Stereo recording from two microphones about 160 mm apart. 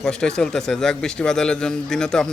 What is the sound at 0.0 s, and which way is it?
Speech, 5° left (ahead or behind).